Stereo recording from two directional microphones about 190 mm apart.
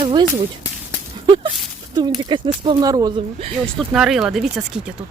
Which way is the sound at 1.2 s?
25° right (ahead or behind).